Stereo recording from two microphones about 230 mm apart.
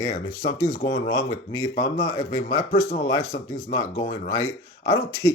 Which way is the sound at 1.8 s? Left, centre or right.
Centre.